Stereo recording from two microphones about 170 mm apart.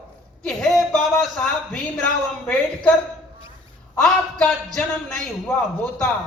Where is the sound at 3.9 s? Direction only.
5° left (ahead or behind).